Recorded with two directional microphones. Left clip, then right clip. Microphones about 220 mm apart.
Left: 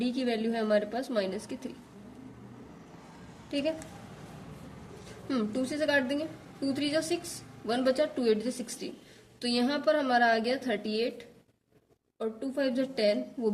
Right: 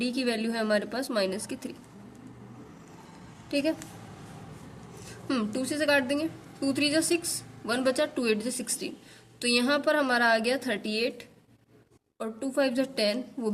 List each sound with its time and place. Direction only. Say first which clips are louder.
0.0 s a woman's voice: right 2 dB; 35° right (ahead or behind)
3.5 s a woman's voice: right 3 dB; 35° right (ahead or behind)
5.3 s a woman's voice: right 2 dB; 35° right (ahead or behind)